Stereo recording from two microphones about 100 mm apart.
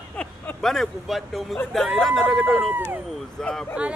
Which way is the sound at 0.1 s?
10° left (ahead or behind).